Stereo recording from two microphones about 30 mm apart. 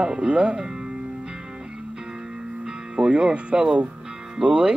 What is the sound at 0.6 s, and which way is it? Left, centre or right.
Music, right.